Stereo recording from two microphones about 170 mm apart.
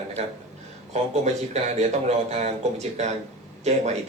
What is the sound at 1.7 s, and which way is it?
Speech, 40° right (ahead or behind).